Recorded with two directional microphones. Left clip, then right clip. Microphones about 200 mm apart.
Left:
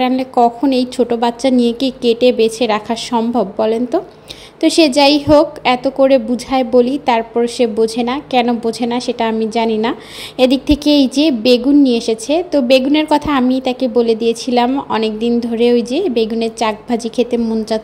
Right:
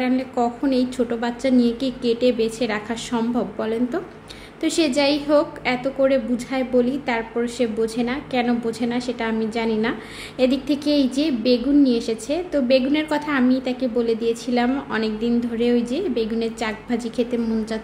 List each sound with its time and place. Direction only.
0.0 s a woman's voice: 30° left (ahead or behind)